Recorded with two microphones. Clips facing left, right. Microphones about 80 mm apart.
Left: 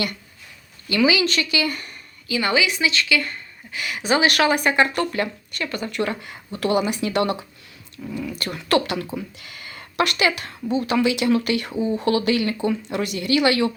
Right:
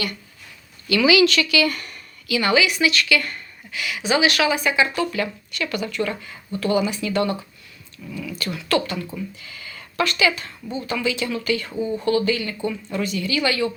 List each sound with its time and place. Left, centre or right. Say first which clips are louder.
0.9 s speech: right 3 dB; left
2.4 s a woman's voice: right 2 dB; left
3.8 s speech: even; left
5.6 s speech: right 2 dB; left
5.9 s a woman's voice: left 1 dB; left
8.3 s speech: left 1 dB; left
10.7 s speech: left 6 dB; left
10.9 s a woman's voice: left 5 dB; left
11.7 s speech: left 2 dB; centre
11.9 s a woman's voice: even; left